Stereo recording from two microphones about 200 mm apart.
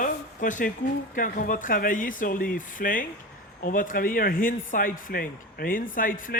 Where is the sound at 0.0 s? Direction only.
40° left (ahead or behind).